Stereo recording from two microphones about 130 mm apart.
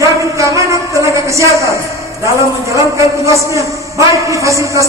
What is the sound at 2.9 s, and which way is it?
A man's voice, 25° right (ahead or behind).